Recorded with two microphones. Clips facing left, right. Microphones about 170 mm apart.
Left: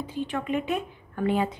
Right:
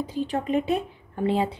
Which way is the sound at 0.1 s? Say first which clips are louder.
Right 2 dB; 35° right (ahead or behind).